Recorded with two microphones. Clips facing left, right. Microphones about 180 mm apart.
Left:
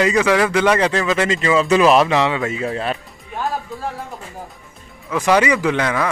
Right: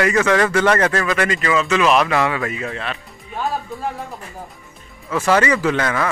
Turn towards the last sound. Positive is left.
turn(degrees=15)  # may be behind; listen again after turning